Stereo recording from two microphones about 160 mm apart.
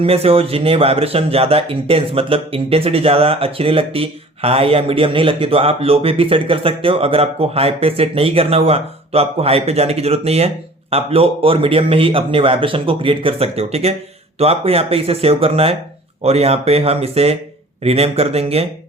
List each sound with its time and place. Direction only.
0.0 s speech: 35° right (ahead or behind)